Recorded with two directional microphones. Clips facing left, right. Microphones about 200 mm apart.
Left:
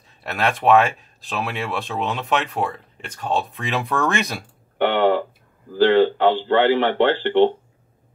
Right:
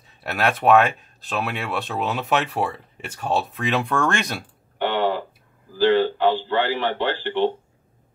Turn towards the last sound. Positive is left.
turn(degrees=60)  # may be behind; listen again after turning